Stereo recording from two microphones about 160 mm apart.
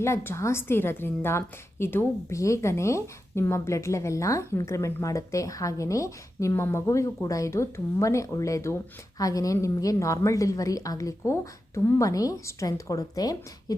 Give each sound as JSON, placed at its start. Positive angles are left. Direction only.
{"t": 0.0, "sound": "a woman's voice", "side_deg": 15}